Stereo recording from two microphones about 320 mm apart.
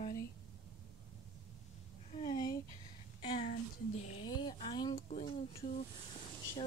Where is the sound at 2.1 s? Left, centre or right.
Centre.